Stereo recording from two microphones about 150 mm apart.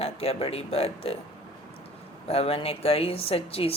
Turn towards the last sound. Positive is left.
turn(degrees=40)  # may be behind; listen again after turning